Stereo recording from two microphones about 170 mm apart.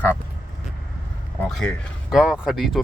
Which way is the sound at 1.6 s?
Centre (ahead or behind).